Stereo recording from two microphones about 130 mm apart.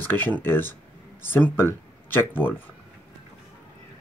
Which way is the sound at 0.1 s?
15° left (ahead or behind).